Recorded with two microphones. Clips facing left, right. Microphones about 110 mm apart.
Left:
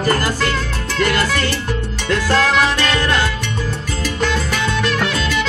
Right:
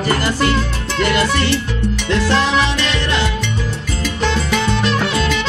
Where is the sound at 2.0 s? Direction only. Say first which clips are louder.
Left 1 dB; 45° left (ahead or behind).